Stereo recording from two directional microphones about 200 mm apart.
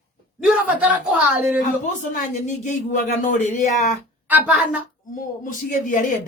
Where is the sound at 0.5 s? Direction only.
5° right (ahead or behind).